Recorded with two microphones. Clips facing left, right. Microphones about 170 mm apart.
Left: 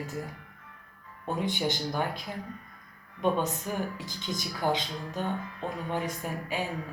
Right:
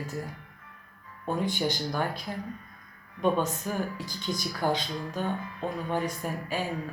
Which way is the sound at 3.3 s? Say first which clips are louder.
Right 1 dB; 20° left (ahead or behind).